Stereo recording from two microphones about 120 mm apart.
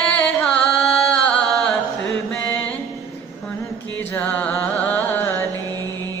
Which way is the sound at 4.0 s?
15° left (ahead or behind).